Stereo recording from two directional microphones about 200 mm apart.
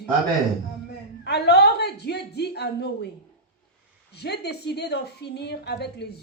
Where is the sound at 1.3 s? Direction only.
55° left (ahead or behind).